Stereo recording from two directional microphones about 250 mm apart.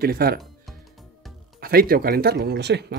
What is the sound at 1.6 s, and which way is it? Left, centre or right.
Speech, right.